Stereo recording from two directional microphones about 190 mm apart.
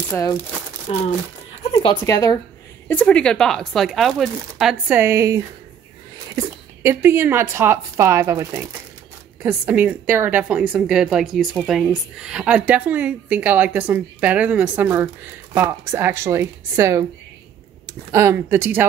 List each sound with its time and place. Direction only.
0.1 s speech: 20° left (ahead or behind)
1.6 s zipper: 30° left (ahead or behind)
2.0 s speech: 20° left (ahead or behind)
2.9 s a woman's voice: 5° left (ahead or behind); by 18.9 s 10° right (ahead or behind)